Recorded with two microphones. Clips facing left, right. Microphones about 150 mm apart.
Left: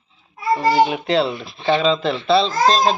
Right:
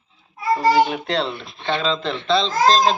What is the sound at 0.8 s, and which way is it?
Speech, 5° left (ahead or behind).